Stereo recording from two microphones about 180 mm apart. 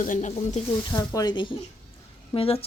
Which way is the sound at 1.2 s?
25° left (ahead or behind).